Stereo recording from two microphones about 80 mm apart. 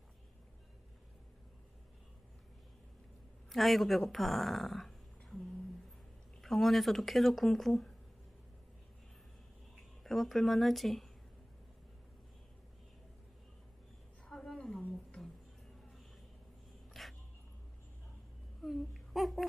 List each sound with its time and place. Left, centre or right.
3.4 s speech: centre
6.4 s speech: centre
10.0 s speech: centre
14.2 s a sound: centre
14.8 s a sound: centre
17.0 s dog: centre
18.6 s babbling: centre